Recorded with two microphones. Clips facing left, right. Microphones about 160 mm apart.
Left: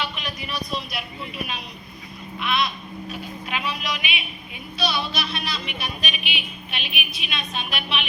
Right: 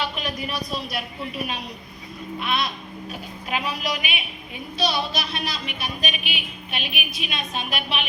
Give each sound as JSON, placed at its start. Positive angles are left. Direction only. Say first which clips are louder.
{"t": 0.7, "sound": "speech", "louder": "right 1 dB", "side_deg": -40}